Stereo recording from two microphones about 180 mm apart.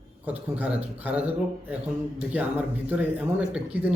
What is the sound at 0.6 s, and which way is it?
Speech, 10° right (ahead or behind).